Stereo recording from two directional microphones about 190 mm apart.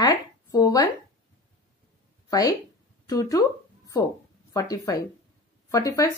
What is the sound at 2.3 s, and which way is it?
Speech, 20° left (ahead or behind).